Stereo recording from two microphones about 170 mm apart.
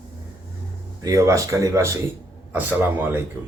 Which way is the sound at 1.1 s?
20° right (ahead or behind).